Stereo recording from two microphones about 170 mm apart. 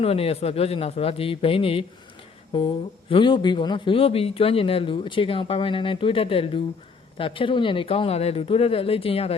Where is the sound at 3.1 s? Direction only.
30° left (ahead or behind).